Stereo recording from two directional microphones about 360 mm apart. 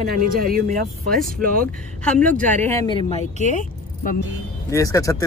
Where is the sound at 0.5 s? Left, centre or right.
Right.